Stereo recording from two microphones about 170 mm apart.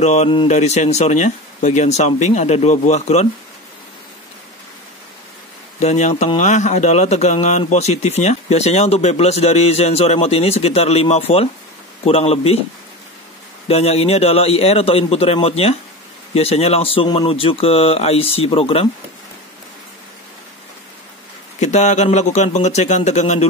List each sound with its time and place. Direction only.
0.0 s speech: 40° left (ahead or behind)
5.8 s speech: 40° left (ahead or behind)
13.7 s speech: 35° left (ahead or behind)
21.5 s speech: 45° left (ahead or behind)